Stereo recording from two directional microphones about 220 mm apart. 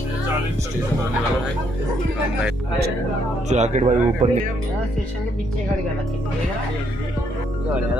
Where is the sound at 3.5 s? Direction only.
30° right (ahead or behind).